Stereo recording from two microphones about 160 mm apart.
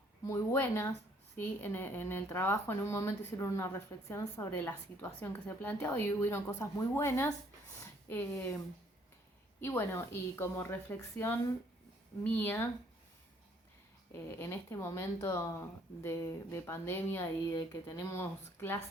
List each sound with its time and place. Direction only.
0.3 s speech: 15° left (ahead or behind)
9.6 s speech: 15° left (ahead or behind)
14.3 s speech: 15° left (ahead or behind)